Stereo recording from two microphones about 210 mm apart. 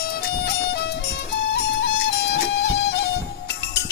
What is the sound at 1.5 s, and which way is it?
Music, 55° left (ahead or behind).